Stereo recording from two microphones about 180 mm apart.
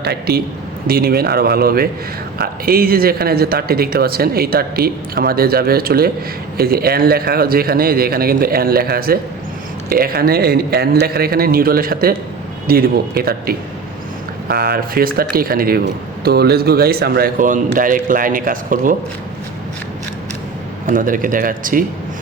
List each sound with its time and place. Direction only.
0.0 s speech: 60° right (ahead or behind)
20.8 s speech: 50° right (ahead or behind)